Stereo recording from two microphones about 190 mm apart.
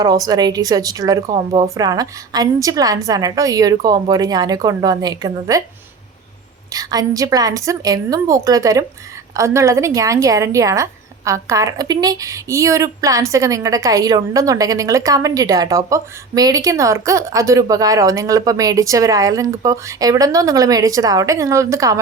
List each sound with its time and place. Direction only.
0.0 s a woman's voice: 20° right (ahead or behind)
6.7 s a woman's voice: 20° right (ahead or behind)